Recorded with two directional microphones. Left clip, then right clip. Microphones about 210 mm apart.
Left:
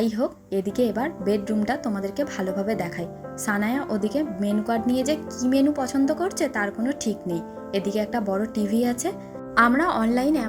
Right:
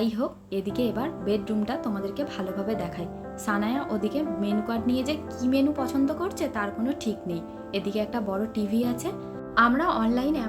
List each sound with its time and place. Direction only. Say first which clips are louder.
0.0 s a woman's voice: left 3 dB; 25° left (ahead or behind)